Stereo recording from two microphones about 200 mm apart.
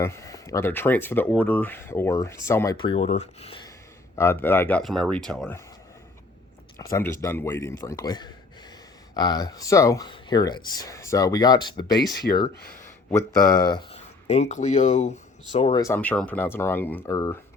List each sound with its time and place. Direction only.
0.0 s speech: 15° left (ahead or behind)
2.8 s speech: 30° left (ahead or behind)
4.1 s speech: 15° left (ahead or behind)
6.9 s speech: 15° left (ahead or behind)
12.3 s speech: 50° left (ahead or behind)
12.8 s speech: 10° left (ahead or behind); by 15.8 s 30° left (ahead or behind)
15.8 s speech: 10° left (ahead or behind)